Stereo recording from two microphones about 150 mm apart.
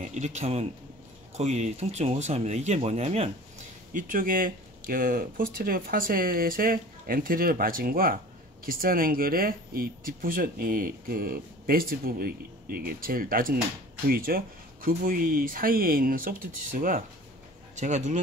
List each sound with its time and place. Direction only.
0.1 s speech: 50° right (ahead or behind)
3.9 s speech: 65° right (ahead or behind)
14.0 s speech: 80° right
17.7 s speech: 50° right (ahead or behind)